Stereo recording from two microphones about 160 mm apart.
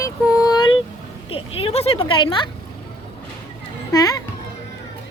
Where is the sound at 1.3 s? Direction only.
35° left (ahead or behind).